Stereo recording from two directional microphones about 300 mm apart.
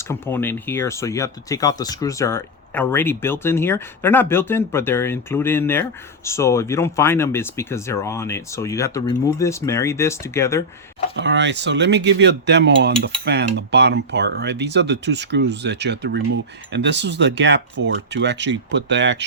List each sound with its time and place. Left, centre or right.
0.1 s speech: centre
11.2 s speech: right